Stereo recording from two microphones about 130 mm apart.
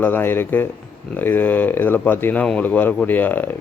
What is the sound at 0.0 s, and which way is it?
Speech, 15° left (ahead or behind).